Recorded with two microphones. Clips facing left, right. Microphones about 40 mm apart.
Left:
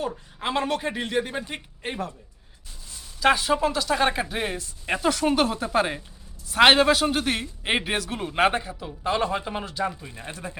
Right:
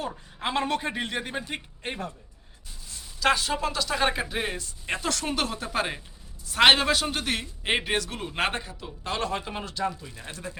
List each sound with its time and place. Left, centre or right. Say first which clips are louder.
0.0 s a man's voice: left 2 dB; centre
3.2 s a man's voice: left 4 dB; centre
9.9 s speech: left 3 dB; left